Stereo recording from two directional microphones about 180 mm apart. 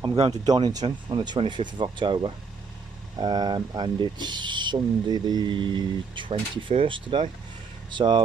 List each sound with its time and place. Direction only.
0.5 s speech: 20° right (ahead or behind)